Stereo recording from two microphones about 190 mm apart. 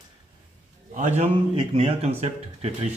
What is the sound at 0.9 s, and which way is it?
Speech, 40° right (ahead or behind).